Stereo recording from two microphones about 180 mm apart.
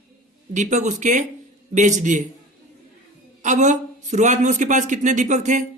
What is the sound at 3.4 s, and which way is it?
A man's voice, 40° right (ahead or behind).